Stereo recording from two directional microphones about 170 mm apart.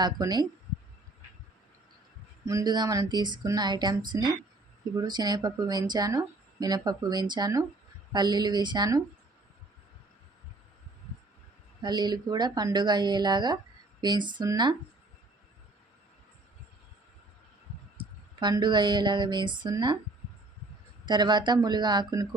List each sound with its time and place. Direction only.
0.0 s speech: 25° right (ahead or behind)
2.5 s speech: 20° right (ahead or behind)
11.8 s speech: 25° right (ahead or behind)
17.9 s a sound: 25° right (ahead or behind)
21.0 s speech: 25° right (ahead or behind)